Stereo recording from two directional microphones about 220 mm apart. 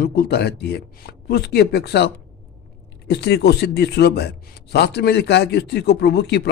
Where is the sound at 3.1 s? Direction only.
50° left (ahead or behind).